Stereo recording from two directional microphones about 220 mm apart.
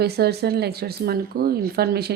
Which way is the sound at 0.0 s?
45° right (ahead or behind).